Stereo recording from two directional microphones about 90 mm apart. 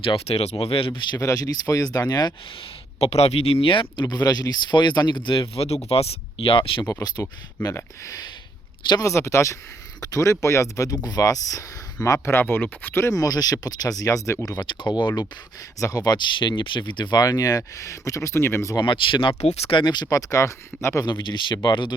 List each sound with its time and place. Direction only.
0.0 s speech: 70° left (ahead or behind)
1.2 s speech: 40° left (ahead or behind)
3.3 s speech: 90° left
4.0 s speech: 45° left (ahead or behind); by 6.8 s 75° left (ahead or behind)
7.0 s speech: 45° left (ahead or behind)
9.0 s speech: 30° left (ahead or behind)
14.7 s speech: 55° left (ahead or behind)
16.4 s speech: 60° left (ahead or behind); by 18.8 s 30° left (ahead or behind)
18.8 s speech: 65° left (ahead or behind); by 21.0 s 35° left (ahead or behind)
21.0 s speech: 55° left (ahead or behind)